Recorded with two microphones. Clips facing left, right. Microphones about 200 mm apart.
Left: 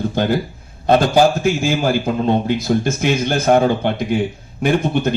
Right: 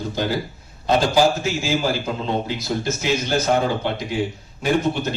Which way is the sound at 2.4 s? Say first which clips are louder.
Left 7 dB; 55° left (ahead or behind).